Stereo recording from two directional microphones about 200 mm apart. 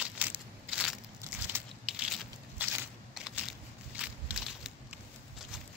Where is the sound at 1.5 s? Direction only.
5° right (ahead or behind).